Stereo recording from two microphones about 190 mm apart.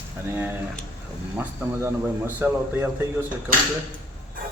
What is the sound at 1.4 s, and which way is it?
Speech, 10° right (ahead or behind).